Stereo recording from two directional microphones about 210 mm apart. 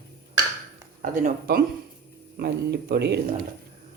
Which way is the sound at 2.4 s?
50° right (ahead or behind).